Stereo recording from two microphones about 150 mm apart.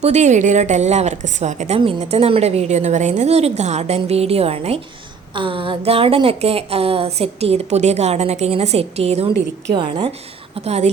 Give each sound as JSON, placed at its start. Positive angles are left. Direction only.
{"t": 0.0, "sound": "a woman's voice", "side_deg": -50}
{"t": 9.7, "sound": "a woman's voice", "side_deg": -30}